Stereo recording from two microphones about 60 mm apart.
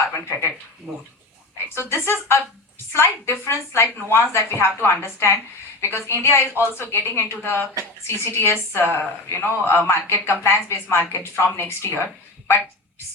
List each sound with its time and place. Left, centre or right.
0.1 s speech: left
0.9 s speech: centre
1.7 s a woman's voice: left